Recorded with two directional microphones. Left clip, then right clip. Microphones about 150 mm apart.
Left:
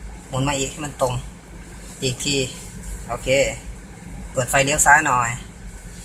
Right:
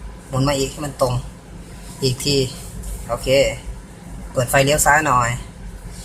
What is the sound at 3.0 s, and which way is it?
Speech, 15° right (ahead or behind).